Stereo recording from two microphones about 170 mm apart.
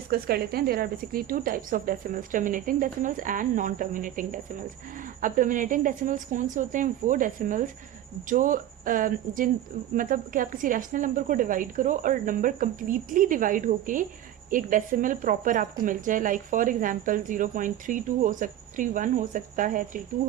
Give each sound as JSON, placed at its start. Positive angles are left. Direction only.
{"t": 0.1, "sound": "a woman's voice", "side_deg": -65}